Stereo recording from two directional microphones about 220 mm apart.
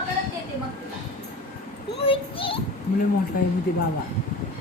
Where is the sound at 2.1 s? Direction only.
25° left (ahead or behind).